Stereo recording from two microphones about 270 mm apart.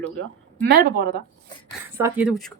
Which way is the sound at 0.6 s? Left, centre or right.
Right.